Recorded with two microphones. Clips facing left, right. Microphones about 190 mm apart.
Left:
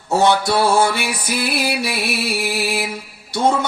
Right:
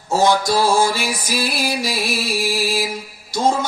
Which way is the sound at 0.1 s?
65° left (ahead or behind).